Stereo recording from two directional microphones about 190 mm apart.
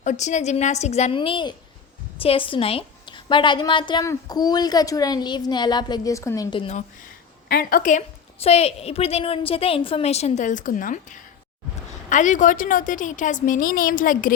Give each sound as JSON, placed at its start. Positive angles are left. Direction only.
{"t": 0.0, "sound": "a woman's voice", "side_deg": 40}
{"t": 7.4, "sound": "a woman's voice", "side_deg": 50}